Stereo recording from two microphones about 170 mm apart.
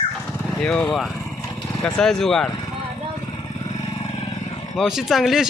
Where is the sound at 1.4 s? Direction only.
20° left (ahead or behind).